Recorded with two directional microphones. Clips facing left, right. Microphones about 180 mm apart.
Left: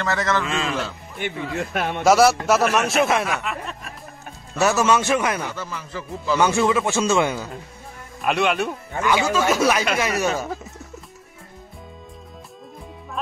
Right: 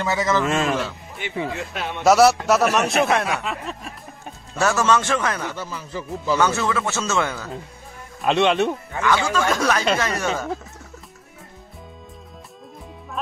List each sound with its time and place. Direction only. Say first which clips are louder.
0.0 s a man's voice: right 2 dB; 5° right (ahead or behind)
0.5 s a man's voice: right 4 dB; 45° right (ahead or behind)
1.5 s speech: left 4 dB; 55° left (ahead or behind)
2.0 s a man's voice: right 1 dB; centre (ahead or behind)
4.6 s a man's voice: left 1 dB; 10° left (ahead or behind)
5.7 s a man's voice: right 2 dB; 5° right (ahead or behind)
6.3 s a man's voice: left 2 dB; 10° left (ahead or behind)
8.2 s speech: right 3 dB; 25° right (ahead or behind)
9.0 s a man's voice: left 1 dB; 10° left (ahead or behind)